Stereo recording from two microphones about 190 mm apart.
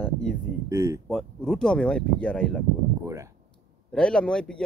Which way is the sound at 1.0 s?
5° left (ahead or behind).